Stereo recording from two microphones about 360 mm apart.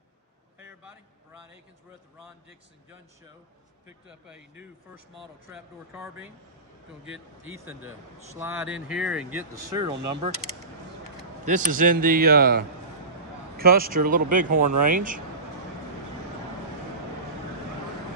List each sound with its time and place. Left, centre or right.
0.6 s a sound: centre
3.8 s speech: centre
11.4 s a man's voice: right